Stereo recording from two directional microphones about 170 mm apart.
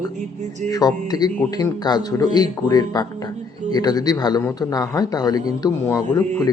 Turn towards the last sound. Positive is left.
turn(degrees=20)  # may be behind; listen again after turning